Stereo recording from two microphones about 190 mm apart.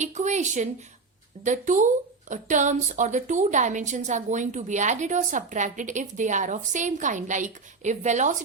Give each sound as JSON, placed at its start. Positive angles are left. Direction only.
{"t": 0.0, "sound": "a woman's voice", "side_deg": -40}